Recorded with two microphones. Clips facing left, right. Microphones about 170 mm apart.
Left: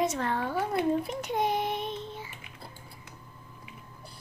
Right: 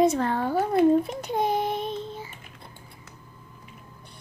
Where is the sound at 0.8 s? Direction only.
35° right (ahead or behind).